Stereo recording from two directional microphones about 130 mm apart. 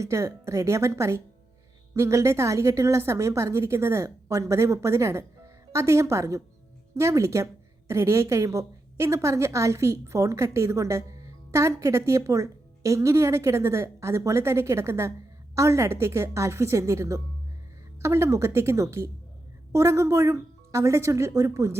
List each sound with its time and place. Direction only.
0.0 s a woman's voice: 25° right (ahead or behind)